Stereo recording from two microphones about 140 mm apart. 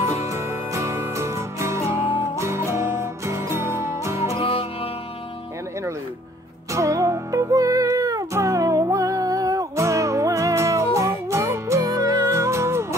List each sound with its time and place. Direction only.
0.3 s music: 20° right (ahead or behind)
4.4 s music: 40° left (ahead or behind)
6.7 s music: 20° right (ahead or behind)